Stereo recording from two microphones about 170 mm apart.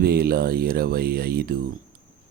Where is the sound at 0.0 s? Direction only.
65° right (ahead or behind).